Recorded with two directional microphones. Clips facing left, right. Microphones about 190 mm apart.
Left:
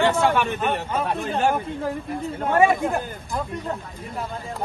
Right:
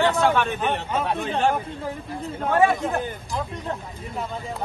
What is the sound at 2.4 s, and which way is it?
Speech, 15° left (ahead or behind).